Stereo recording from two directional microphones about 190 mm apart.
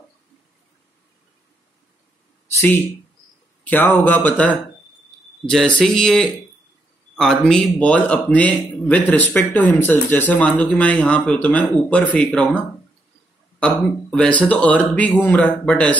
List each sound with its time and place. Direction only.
2.5 s a man's voice: 10° left (ahead or behind)
12.3 s a man's voice: 5° right (ahead or behind)